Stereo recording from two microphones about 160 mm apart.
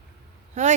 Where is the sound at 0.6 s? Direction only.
45° right (ahead or behind).